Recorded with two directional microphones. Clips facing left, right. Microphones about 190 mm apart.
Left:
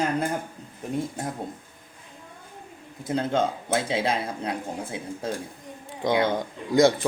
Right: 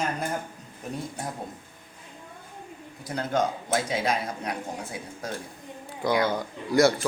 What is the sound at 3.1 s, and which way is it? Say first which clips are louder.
A man's voice: left 2 dB; 25° left (ahead or behind).